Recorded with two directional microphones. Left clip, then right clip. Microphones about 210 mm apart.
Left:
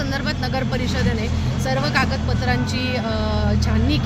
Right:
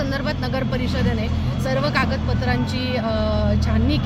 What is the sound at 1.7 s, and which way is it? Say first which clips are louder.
Speech: even; centre (ahead or behind).